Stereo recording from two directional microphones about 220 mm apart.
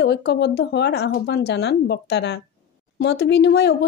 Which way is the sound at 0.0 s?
50° left (ahead or behind).